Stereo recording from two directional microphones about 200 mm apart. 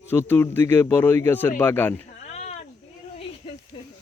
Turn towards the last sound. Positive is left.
turn(degrees=25)  # may be behind; listen again after turning